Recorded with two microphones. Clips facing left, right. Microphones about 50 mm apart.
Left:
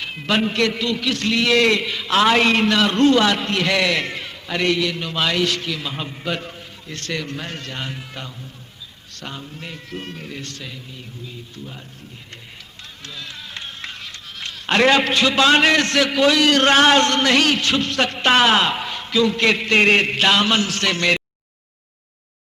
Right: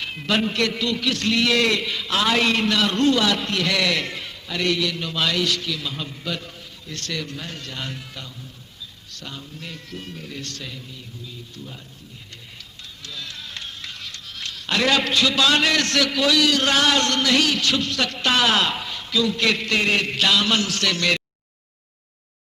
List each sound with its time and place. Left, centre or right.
0.0 s a sound: centre
0.3 s a man's voice: left
2.0 s a man's voice: left
7.8 s a man's voice: left
9.1 s a man's voice: left
10.0 s speech: left
10.3 s a man's voice: centre
13.0 s a sound: left
14.7 s a man's voice: left
18.8 s a sound: left
19.7 s a man's voice: left